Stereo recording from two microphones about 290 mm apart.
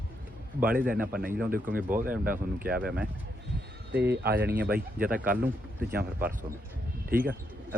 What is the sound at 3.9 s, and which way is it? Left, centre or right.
Speech, right.